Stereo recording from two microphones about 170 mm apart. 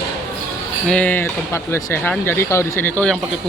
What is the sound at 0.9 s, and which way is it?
Speech, 10° left (ahead or behind).